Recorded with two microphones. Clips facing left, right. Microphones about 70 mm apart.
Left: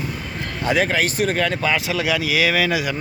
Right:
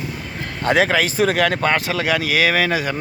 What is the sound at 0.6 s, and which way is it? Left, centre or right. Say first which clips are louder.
Speech: right 3 dB; right.